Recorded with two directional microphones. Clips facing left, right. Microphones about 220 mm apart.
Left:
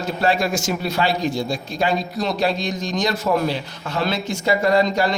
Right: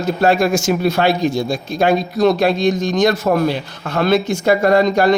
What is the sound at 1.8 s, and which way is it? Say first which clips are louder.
A man's voice: right 9 dB; 60° right (ahead or behind).